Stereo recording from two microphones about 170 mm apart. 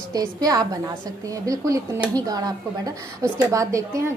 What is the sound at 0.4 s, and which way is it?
A woman's voice, 20° right (ahead or behind).